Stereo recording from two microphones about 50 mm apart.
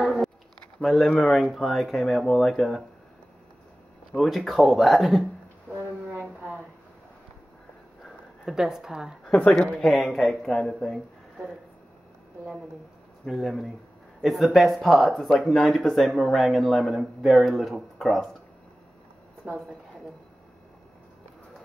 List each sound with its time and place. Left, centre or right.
0.0 s a sound: centre
0.8 s speech: centre
4.1 s speech: centre
5.7 s brass instrument: right
8.5 s a woman's voice: centre
9.2 s a woman's voice: left
9.9 s speech: centre
13.2 s speech: centre